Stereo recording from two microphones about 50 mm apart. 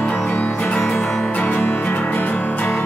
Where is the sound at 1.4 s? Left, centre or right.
Left.